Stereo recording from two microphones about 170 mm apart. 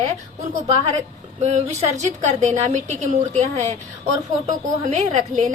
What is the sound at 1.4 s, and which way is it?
A woman's voice, 40° right (ahead or behind).